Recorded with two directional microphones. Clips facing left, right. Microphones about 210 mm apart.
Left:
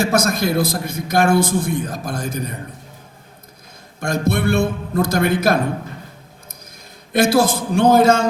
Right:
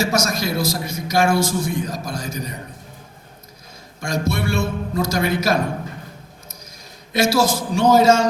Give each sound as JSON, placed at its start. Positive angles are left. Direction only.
{"t": 0.0, "sound": "a man's voice", "side_deg": 55}
{"t": 4.0, "sound": "a man's voice", "side_deg": 55}
{"t": 7.1, "sound": "a man's voice", "side_deg": 55}